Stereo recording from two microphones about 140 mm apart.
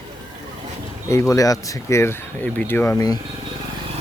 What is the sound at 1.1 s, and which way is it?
Speech, 20° left (ahead or behind).